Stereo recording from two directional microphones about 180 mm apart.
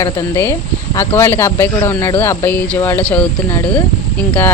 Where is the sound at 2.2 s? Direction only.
10° left (ahead or behind).